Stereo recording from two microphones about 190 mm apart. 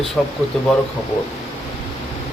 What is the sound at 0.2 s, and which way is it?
Speech, centre (ahead or behind).